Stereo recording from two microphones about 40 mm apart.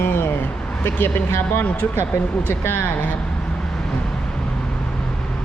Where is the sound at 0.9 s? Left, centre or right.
Left.